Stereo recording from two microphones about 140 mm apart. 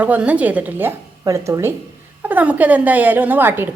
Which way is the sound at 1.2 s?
25° right (ahead or behind).